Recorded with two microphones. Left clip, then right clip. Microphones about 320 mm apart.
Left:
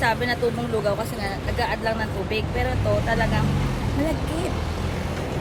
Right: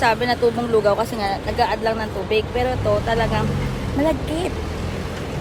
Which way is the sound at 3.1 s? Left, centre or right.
Centre.